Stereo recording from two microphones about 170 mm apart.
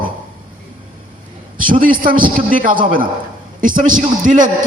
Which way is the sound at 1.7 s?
55° right (ahead or behind).